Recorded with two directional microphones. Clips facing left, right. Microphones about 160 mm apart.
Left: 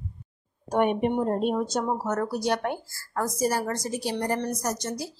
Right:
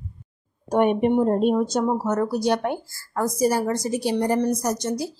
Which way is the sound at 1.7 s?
15° right (ahead or behind).